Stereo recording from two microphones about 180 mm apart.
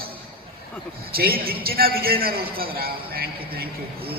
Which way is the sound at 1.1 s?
55° right (ahead or behind).